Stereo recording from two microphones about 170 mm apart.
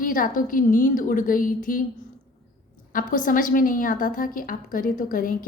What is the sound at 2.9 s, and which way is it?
A woman's voice, 50° left (ahead or behind).